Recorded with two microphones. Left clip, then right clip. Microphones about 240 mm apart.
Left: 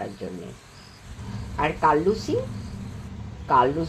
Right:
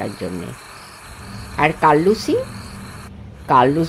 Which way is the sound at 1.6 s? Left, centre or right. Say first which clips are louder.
Right 7 dB; right.